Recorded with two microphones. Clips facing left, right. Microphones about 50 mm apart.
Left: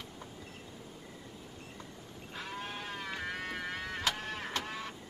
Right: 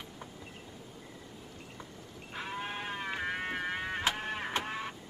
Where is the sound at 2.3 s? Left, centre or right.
Right.